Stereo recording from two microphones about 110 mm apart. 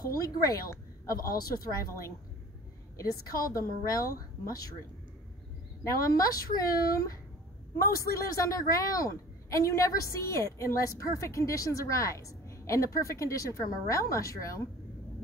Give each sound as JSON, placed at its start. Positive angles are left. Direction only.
{"t": 0.0, "sound": "a woman's voice", "side_deg": 35}
{"t": 5.9, "sound": "a woman's voice", "side_deg": 30}